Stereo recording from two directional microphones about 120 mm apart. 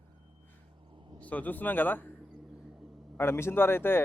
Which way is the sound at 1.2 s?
15° left (ahead or behind).